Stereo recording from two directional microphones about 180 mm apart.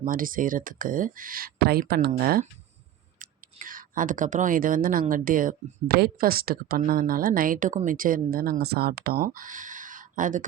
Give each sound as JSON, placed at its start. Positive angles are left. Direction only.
{"t": 0.0, "sound": "speech", "side_deg": -50}